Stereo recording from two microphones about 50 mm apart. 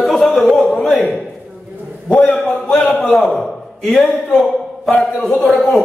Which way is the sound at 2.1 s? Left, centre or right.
Left.